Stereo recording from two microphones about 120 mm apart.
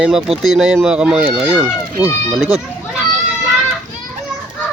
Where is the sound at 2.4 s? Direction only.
5° right (ahead or behind).